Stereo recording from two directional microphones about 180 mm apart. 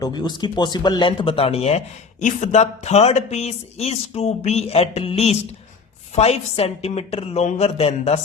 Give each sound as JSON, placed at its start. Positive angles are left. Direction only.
{"t": 0.0, "sound": "speech", "side_deg": 25}